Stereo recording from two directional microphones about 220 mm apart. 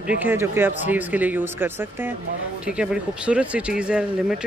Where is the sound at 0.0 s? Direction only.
10° right (ahead or behind).